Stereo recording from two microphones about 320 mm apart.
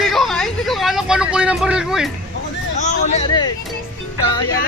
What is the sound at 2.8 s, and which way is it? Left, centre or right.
Hubbub, left.